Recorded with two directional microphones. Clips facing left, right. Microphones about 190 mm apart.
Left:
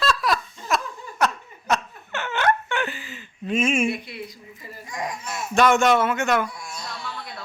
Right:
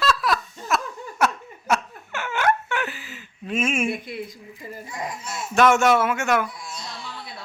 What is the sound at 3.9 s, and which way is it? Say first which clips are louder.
Speech: even; 50° right (ahead or behind).